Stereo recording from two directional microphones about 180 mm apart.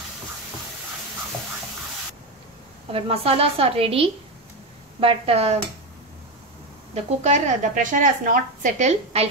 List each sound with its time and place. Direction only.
2.9 s a woman's voice: 35° right (ahead or behind)
7.1 s a woman's voice: 40° right (ahead or behind)